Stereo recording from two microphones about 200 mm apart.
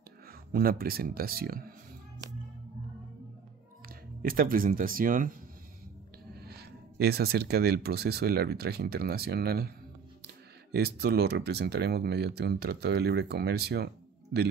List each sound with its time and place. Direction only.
0.3 s speech: 50° right (ahead or behind)
4.2 s speech: 45° right (ahead or behind)
6.3 s speech: 50° right (ahead or behind)